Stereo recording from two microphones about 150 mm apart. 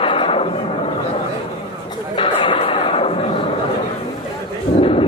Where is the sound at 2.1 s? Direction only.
35° left (ahead or behind).